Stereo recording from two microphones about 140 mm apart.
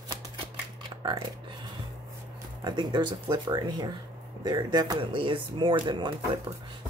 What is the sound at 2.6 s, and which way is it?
Speech, 30° right (ahead or behind).